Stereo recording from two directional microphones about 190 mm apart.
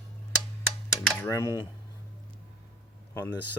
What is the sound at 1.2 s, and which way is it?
Speech, 15° left (ahead or behind).